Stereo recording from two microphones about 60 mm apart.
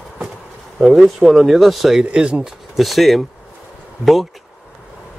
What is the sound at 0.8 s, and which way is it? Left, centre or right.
Speech, centre.